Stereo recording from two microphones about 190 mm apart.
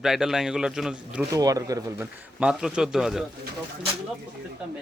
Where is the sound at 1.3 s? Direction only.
20° right (ahead or behind).